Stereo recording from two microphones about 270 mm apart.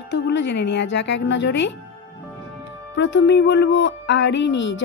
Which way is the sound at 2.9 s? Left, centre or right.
Left.